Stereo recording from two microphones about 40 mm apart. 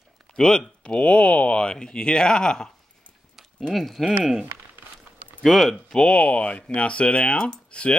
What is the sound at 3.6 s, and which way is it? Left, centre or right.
Speech, centre.